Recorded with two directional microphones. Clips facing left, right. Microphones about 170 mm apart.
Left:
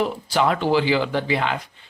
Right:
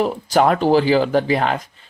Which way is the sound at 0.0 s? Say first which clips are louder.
Right 5 dB; 45° right (ahead or behind).